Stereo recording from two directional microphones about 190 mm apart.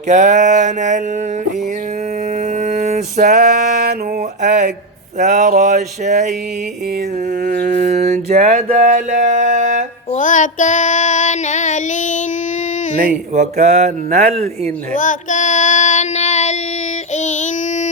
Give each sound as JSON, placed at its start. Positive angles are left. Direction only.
{"t": 0.1, "sound": "speech", "side_deg": -40}
{"t": 2.6, "sound": "music", "side_deg": -40}
{"t": 4.4, "sound": "a sound", "side_deg": -40}
{"t": 7.4, "sound": "mantra", "side_deg": -40}
{"t": 8.6, "sound": "a sound", "side_deg": -40}
{"t": 10.1, "sound": "child singing", "side_deg": 40}
{"t": 13.3, "sound": "speech", "side_deg": -35}
{"t": 14.9, "sound": "child singing", "side_deg": 40}
{"t": 17.2, "sound": "female singing", "side_deg": 40}